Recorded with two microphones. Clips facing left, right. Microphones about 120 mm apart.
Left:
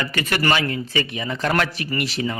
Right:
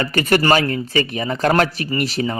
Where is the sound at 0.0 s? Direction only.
40° right (ahead or behind).